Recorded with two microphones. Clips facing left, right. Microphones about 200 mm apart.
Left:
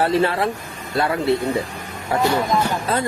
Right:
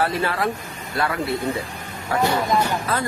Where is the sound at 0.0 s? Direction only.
25° left (ahead or behind).